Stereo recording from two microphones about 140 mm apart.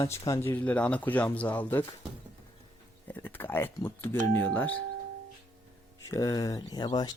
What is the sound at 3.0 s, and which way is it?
Speech, 15° left (ahead or behind).